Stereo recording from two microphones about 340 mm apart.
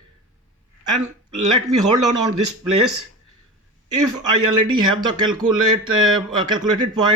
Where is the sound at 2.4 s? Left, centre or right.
Right.